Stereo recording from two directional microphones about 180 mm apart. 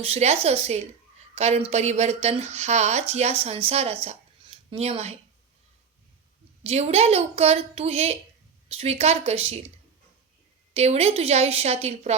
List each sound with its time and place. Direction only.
0.0 s speech: 35° right (ahead or behind)
4.0 s a sound: 35° right (ahead or behind)
6.6 s speech: 35° right (ahead or behind)
10.8 s speech: 35° right (ahead or behind)